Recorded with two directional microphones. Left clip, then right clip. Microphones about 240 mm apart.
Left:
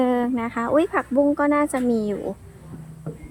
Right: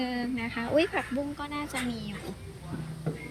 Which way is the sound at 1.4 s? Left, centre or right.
Left.